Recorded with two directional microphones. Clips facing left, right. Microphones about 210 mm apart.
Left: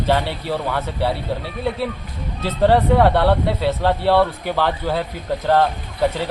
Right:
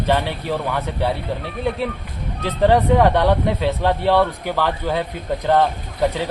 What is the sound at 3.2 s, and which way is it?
Speech, 15° right (ahead or behind).